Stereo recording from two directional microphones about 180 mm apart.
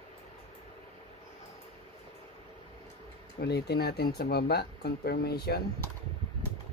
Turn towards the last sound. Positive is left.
turn(degrees=60)  # may be behind; listen again after turning